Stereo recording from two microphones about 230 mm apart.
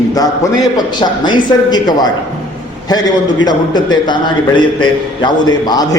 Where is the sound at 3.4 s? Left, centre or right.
Centre.